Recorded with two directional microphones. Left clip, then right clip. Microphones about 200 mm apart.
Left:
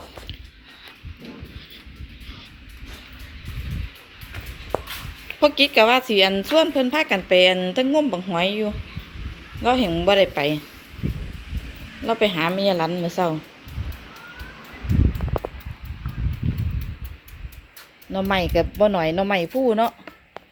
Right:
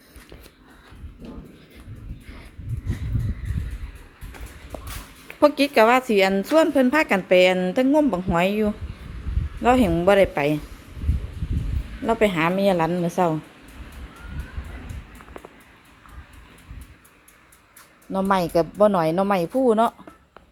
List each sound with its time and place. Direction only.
5.4 s a woman's voice: 15° right (ahead or behind)
12.0 s a woman's voice: 10° right (ahead or behind)
18.1 s a woman's voice: 10° right (ahead or behind)